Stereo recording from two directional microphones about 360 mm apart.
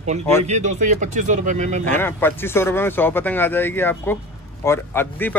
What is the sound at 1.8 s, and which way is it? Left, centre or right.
A man's voice, centre.